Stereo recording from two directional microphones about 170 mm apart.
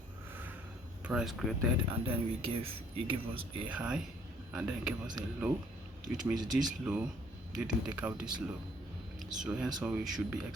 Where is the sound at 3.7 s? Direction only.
5° right (ahead or behind).